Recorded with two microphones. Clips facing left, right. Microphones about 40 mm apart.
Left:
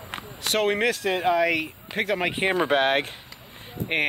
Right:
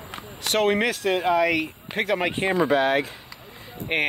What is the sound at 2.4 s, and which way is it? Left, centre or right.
Speech, centre.